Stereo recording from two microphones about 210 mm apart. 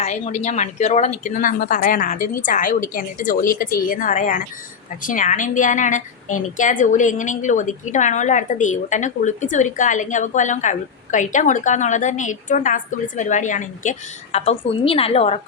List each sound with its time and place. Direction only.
0.0 s a woman's voice: 30° left (ahead or behind)